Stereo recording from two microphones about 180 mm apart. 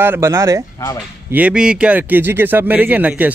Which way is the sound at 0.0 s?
15° right (ahead or behind).